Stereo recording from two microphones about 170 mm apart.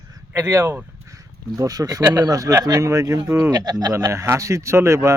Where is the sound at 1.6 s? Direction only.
20° right (ahead or behind).